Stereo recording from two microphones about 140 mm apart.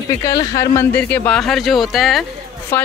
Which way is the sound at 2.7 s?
15° left (ahead or behind).